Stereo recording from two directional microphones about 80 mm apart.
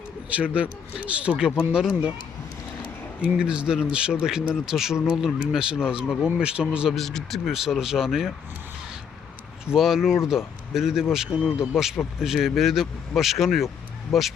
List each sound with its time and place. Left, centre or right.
0.3 s speech: centre
3.2 s speech: centre
6.9 s speech: centre
9.7 s speech: centre